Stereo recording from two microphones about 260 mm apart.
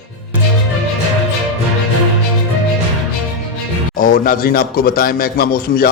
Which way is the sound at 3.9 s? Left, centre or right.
Left.